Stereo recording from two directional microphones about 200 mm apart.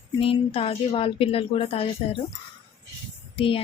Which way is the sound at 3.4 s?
25° left (ahead or behind).